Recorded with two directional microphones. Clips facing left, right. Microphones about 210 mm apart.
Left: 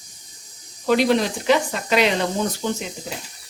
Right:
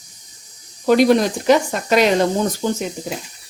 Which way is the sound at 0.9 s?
45° right (ahead or behind).